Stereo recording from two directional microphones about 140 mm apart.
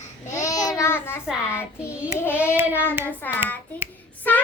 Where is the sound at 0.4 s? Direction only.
25° left (ahead or behind).